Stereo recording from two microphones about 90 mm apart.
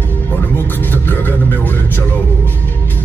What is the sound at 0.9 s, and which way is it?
Vehicle, 20° left (ahead or behind).